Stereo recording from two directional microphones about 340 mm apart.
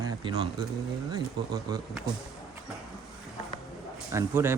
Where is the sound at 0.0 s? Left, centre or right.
Centre.